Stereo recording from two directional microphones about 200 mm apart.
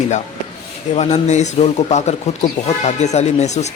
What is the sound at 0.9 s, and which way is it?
Speech, 35° left (ahead or behind).